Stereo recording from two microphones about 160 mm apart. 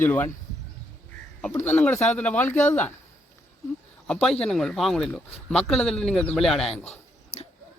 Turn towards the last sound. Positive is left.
turn(degrees=40)  # may be behind; listen again after turning